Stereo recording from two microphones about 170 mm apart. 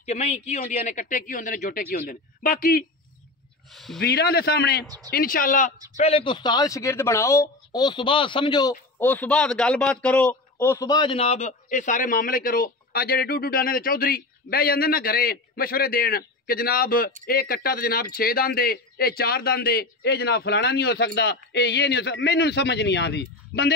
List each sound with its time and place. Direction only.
0.0 s a man's voice: 40° left (ahead or behind); by 2.8 s 55° left (ahead or behind)
3.7 s speech: centre (ahead or behind)
4.0 s a man's voice: 65° left (ahead or behind)
5.9 s speech: 35° left (ahead or behind)
9.0 s a man's voice: 10° left (ahead or behind); by 23.7 s 80° left